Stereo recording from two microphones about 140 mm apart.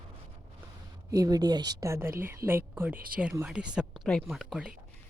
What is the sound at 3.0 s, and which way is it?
Speech, 90° right.